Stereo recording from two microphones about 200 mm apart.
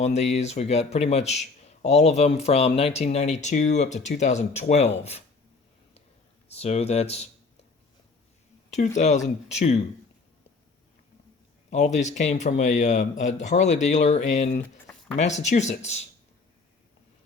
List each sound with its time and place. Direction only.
0.0 s a man's voice: 35° left (ahead or behind)
6.5 s a man's voice: 30° left (ahead or behind)
9.0 s a man's voice: 35° left (ahead or behind)
11.7 s a man's voice: 35° left (ahead or behind)